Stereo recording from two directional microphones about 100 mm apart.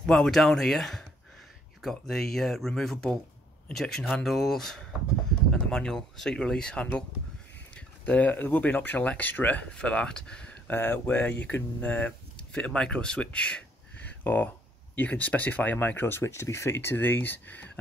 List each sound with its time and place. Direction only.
0.0 s speech: 5° left (ahead or behind)
10.7 s speech: 20° left (ahead or behind)